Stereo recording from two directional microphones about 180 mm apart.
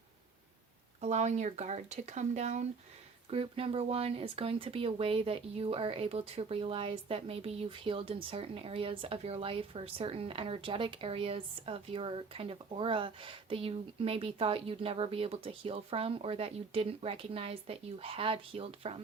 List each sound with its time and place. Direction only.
1.0 s speech: 40° right (ahead or behind)